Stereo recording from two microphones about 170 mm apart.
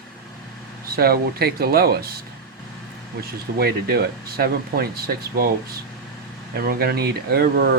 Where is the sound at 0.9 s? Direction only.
65° right (ahead or behind).